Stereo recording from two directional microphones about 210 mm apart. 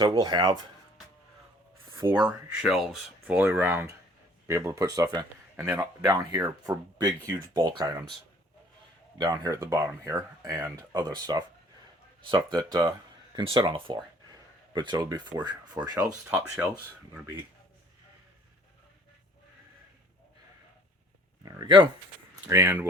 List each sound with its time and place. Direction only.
0.0 s speech: 20° right (ahead or behind)
2.0 s speech: 20° right (ahead or behind)
2.2 s speech: 5° right (ahead or behind); by 8.0 s 20° right (ahead or behind)
9.1 s speech: 20° right (ahead or behind)
21.4 s speech: 20° right (ahead or behind)